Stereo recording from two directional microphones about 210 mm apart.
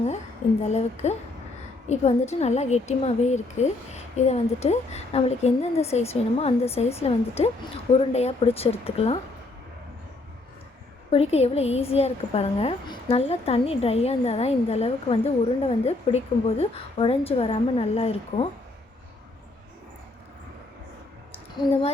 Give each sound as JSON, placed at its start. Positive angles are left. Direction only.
{"t": 0.6, "sound": "a woman's voice", "side_deg": 30}
{"t": 11.1, "sound": "a woman's voice", "side_deg": 30}